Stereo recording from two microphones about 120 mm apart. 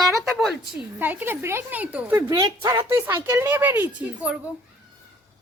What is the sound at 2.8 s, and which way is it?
A woman's voice, 20° right (ahead or behind).